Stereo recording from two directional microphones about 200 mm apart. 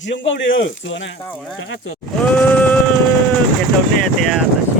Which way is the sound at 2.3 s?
5° left (ahead or behind).